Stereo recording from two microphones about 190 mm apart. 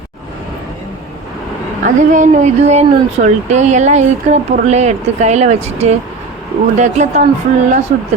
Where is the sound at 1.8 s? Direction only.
40° right (ahead or behind).